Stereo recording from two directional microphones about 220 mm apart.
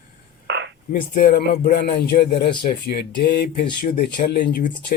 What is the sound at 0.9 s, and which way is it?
A man's voice, 45° left (ahead or behind).